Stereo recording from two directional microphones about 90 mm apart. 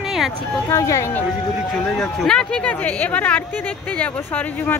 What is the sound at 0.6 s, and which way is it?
Speech, 35° left (ahead or behind).